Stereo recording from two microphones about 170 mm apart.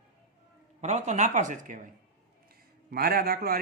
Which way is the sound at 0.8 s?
40° right (ahead or behind).